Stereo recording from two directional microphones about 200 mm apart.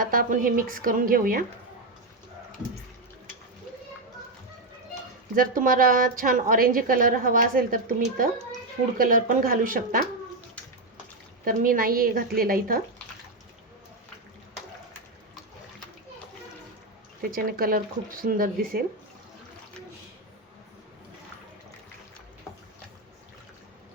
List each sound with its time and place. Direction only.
0.0 s a woman's voice: 45° right (ahead or behind)
5.3 s a woman's voice: 45° right (ahead or behind)
11.4 s a woman's voice: 45° right (ahead or behind)
17.2 s a woman's voice: 45° right (ahead or behind)